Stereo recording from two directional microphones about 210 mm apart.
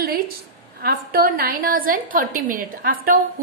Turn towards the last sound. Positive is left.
turn(degrees=-45)  # may be behind; listen again after turning